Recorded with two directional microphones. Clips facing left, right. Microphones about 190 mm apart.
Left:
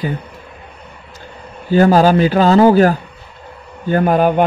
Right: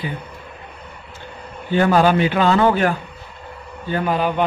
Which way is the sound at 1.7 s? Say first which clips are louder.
Left 5 dB; 40° left (ahead or behind).